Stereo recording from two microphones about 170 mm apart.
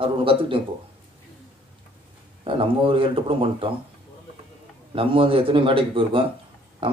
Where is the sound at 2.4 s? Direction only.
30° right (ahead or behind).